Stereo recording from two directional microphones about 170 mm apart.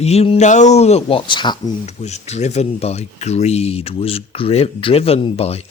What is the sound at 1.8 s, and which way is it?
Speech, 40° left (ahead or behind).